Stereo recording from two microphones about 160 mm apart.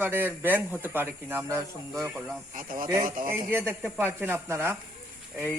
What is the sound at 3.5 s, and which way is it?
Speech, 10° right (ahead or behind).